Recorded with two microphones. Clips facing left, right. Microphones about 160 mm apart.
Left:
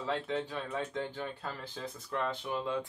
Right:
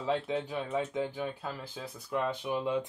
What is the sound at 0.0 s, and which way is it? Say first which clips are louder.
Speech: right 3 dB; 15° right (ahead or behind).